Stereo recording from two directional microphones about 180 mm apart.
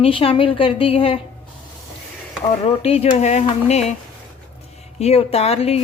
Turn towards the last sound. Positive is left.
turn(degrees=35)  # may be behind; listen again after turning